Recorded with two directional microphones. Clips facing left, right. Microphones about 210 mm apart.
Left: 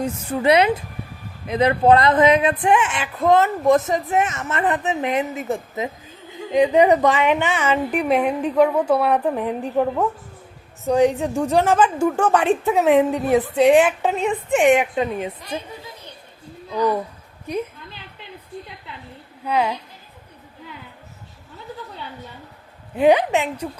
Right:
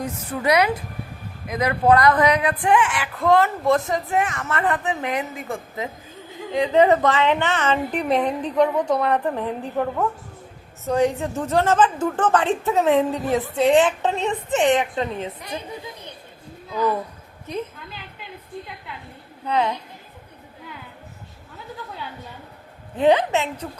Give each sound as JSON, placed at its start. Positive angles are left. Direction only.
{"t": 0.0, "sound": "a woman's voice", "side_deg": 25}
{"t": 17.4, "sound": "a woman's voice", "side_deg": 10}
{"t": 19.5, "sound": "a woman's voice", "side_deg": 10}
{"t": 23.0, "sound": "a woman's voice", "side_deg": 15}